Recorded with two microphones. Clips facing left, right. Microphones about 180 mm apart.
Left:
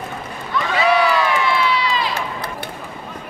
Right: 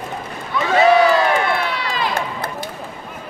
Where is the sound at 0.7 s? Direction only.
45° right (ahead or behind).